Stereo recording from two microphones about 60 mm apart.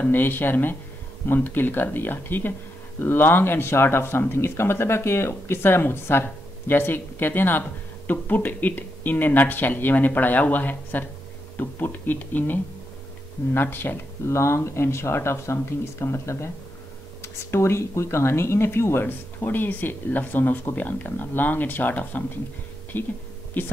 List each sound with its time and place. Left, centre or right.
0.1 s speech: left
14.3 s speech: left